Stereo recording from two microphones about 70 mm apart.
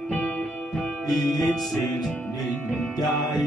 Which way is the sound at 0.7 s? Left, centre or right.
Centre.